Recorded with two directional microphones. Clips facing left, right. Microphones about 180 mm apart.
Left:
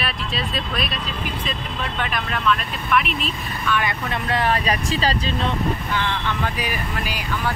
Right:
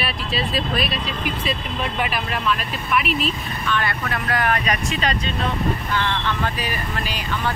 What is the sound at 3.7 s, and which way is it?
Speech, 15° left (ahead or behind).